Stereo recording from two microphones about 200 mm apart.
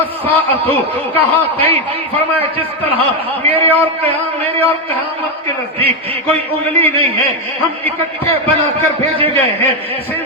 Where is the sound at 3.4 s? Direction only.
30° right (ahead or behind).